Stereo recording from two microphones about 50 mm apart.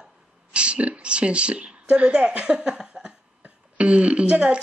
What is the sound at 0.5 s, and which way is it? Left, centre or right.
Speech, right.